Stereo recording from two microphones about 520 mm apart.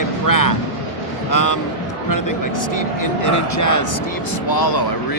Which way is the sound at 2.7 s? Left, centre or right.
Left.